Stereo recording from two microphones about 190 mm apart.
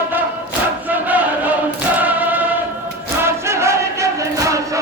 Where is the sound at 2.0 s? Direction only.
10° right (ahead or behind).